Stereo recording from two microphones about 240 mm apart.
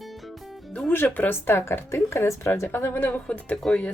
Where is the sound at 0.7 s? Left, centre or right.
Centre.